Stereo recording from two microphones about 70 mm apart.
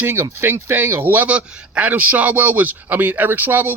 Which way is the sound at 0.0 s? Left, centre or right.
Right.